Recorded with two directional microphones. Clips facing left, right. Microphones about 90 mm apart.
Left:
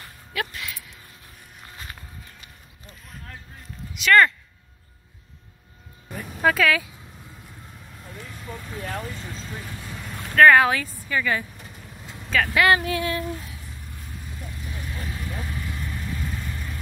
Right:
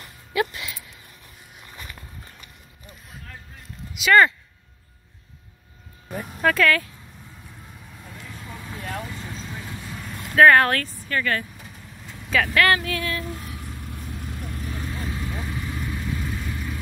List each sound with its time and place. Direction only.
0.3 s a sound: 5° right (ahead or behind)
4.0 s speech: 5° right (ahead or behind)
6.4 s speech: 5° left (ahead or behind)
8.5 s vehicle: centre (ahead or behind)
12.5 s speech: 15° left (ahead or behind)
12.8 s a sound: 25° left (ahead or behind)
14.5 s vehicle: 40° right (ahead or behind)
15.0 s vehicle: 20° right (ahead or behind); by 16.7 s 5° right (ahead or behind)